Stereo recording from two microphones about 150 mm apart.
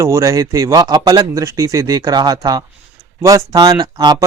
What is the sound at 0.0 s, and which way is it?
Speech, 20° right (ahead or behind).